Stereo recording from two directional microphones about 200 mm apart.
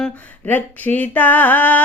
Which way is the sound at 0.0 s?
5° left (ahead or behind).